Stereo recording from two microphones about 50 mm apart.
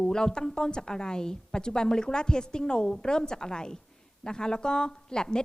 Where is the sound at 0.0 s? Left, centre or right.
Centre.